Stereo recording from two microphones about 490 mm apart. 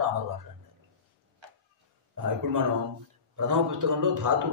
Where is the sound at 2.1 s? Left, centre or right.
Right.